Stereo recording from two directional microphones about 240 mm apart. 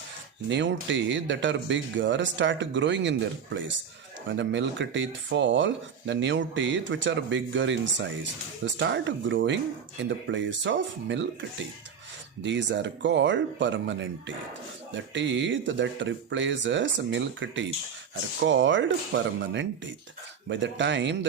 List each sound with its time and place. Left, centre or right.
0.4 s speech: right